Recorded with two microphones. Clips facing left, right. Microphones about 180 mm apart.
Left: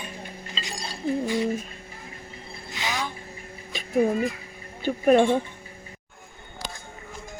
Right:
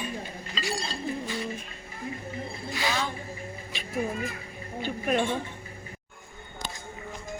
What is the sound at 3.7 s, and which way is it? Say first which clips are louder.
Music: left 9 dB; 45° left (ahead or behind).